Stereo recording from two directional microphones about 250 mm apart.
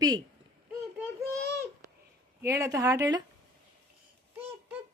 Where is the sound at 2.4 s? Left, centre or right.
Centre.